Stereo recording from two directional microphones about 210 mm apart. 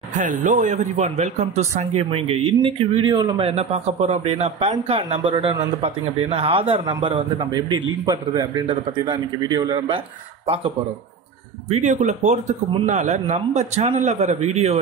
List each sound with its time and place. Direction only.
0.2 s a man's voice: 40° right (ahead or behind)
11.7 s a man's voice: 35° right (ahead or behind)